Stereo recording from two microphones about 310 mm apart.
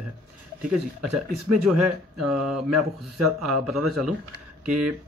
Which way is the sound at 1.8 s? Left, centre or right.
Centre.